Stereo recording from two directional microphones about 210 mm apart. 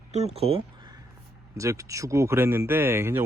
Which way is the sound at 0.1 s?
30° right (ahead or behind).